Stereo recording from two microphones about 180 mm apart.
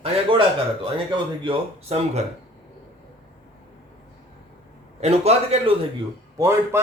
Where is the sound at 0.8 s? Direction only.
30° right (ahead or behind).